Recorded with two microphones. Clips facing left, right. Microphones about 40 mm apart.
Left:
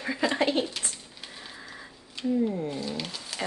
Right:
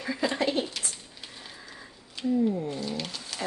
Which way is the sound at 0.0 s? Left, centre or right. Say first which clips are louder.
Left 1 dB; left.